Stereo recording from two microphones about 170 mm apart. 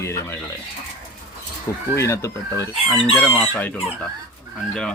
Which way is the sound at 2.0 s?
15° left (ahead or behind).